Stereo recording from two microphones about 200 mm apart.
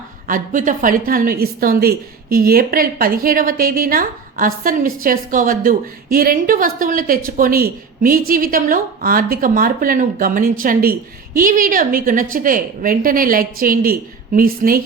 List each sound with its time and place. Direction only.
0.3 s a woman's voice: 40° right (ahead or behind)